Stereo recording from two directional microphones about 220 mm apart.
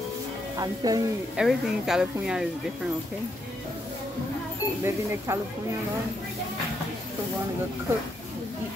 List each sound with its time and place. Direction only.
0.6 s speech: 15° right (ahead or behind)
1.3 s speech: centre (ahead or behind)
4.8 s speech: 10° right (ahead or behind)